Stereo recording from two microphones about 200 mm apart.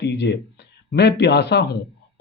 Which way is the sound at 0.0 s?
60° left (ahead or behind).